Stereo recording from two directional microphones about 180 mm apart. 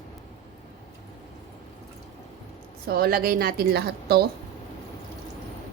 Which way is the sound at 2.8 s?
55° right (ahead or behind).